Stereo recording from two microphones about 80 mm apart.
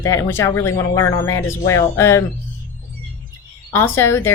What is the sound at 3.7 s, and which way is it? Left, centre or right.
Speech, left.